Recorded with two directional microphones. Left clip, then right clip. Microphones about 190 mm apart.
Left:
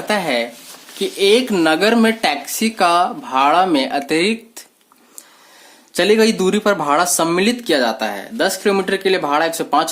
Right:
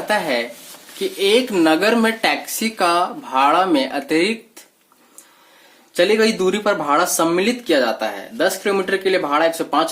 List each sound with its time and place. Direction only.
0.1 s speech: 35° left (ahead or behind)
5.9 s speech: 40° left (ahead or behind)